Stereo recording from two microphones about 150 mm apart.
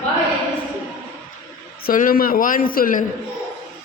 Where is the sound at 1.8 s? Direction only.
70° left (ahead or behind).